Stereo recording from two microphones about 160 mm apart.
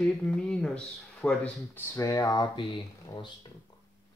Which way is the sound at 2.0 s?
20° left (ahead or behind).